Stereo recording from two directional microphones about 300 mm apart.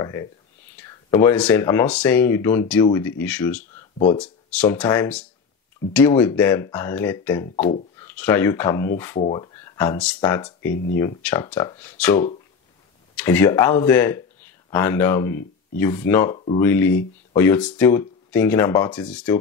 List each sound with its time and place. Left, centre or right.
0.0 s speech: centre
16.3 s speech: centre
16.6 s speech: centre